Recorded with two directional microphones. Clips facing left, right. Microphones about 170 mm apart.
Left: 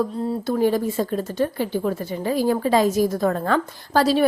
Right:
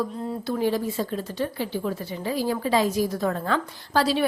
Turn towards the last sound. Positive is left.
turn(degrees=45)  # may be behind; listen again after turning